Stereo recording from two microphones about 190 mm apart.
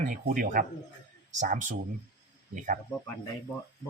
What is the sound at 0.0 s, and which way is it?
Speech, 45° right (ahead or behind).